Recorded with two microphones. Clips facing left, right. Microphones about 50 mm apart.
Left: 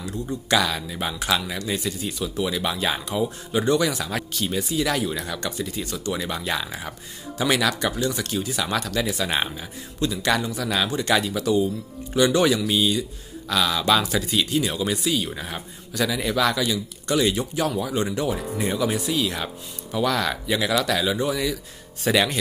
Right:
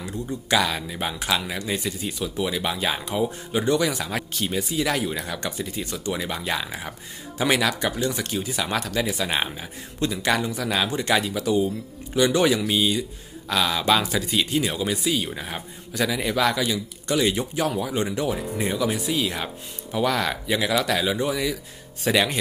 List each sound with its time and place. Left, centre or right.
0.3 s speech: centre
3.6 s speech: centre
3.9 s speech: centre
19.0 s speech: centre